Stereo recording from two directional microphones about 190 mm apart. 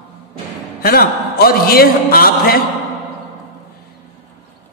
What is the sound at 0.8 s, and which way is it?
A man's voice, 55° left (ahead or behind).